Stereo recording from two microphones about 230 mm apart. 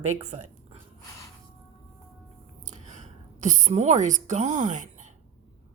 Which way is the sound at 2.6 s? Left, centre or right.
Right.